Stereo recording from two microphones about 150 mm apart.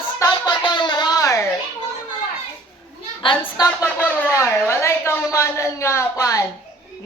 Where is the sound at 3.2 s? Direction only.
35° left (ahead or behind).